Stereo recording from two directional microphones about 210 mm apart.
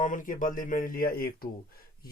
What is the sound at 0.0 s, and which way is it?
Speech, 40° left (ahead or behind).